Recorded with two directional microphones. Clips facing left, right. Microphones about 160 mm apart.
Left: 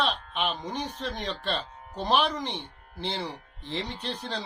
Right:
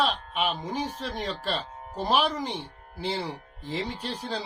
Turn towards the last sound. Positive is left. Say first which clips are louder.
# right 1 dB
turn(degrees=-5)  # may be behind; listen again after turning